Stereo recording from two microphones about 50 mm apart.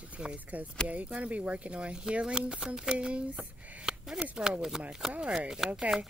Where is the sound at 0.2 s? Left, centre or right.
Right; by 5.8 s centre.